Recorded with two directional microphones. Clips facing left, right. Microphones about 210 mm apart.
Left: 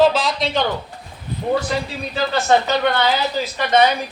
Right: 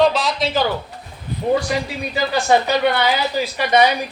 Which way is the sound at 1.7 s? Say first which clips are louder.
Right 1 dB; 10° right (ahead or behind).